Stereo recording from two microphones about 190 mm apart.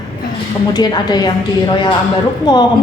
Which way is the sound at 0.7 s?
20° left (ahead or behind).